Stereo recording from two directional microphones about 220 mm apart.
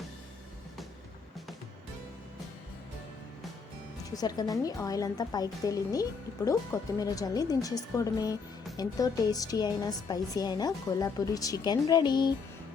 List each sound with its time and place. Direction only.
4.1 s speech: 15° left (ahead or behind)